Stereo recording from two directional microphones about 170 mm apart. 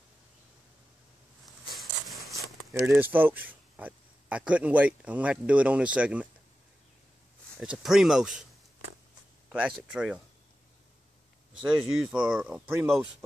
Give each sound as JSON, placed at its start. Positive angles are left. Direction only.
{"t": 1.8, "sound": "a sound", "side_deg": 0}
{"t": 2.3, "sound": "walk", "side_deg": -20}
{"t": 2.9, "sound": "a man's voice", "side_deg": -10}
{"t": 7.6, "sound": "speech", "side_deg": -5}
{"t": 9.5, "sound": "a man's voice", "side_deg": -5}
{"t": 11.6, "sound": "speech", "side_deg": -5}